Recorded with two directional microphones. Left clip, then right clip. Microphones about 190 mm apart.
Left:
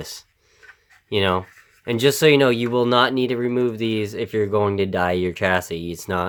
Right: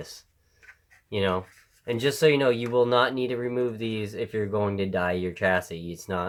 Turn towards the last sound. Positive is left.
turn(degrees=40)  # may be behind; listen again after turning